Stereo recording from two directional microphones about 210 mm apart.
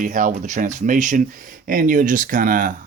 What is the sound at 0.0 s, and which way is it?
Speech, 40° right (ahead or behind).